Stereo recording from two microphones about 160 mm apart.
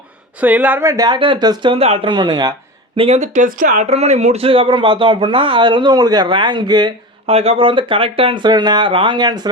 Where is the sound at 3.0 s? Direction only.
40° right (ahead or behind).